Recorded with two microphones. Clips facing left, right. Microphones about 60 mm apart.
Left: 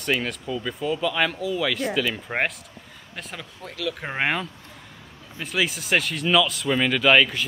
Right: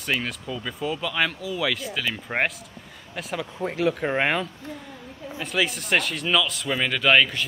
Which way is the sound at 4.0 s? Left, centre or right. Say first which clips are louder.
Right 2 dB; centre.